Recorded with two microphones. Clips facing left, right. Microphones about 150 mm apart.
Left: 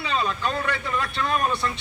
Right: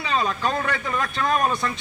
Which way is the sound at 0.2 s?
40° right (ahead or behind).